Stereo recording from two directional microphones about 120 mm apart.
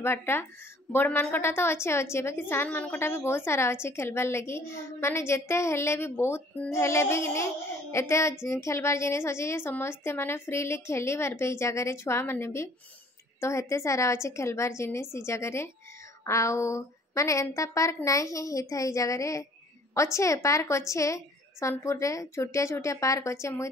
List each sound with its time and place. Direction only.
0.0 s a woman's voice: 20° left (ahead or behind)